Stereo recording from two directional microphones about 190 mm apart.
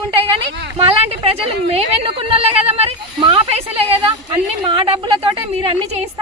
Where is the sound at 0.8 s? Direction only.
30° right (ahead or behind).